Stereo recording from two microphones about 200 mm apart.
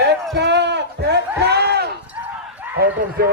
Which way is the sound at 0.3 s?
60° right (ahead or behind).